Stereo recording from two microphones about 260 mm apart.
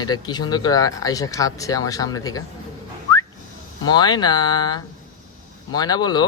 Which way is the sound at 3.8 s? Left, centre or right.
Centre.